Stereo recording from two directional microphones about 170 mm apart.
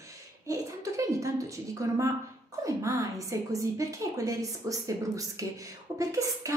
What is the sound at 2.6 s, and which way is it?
A woman's voice, 20° right (ahead or behind).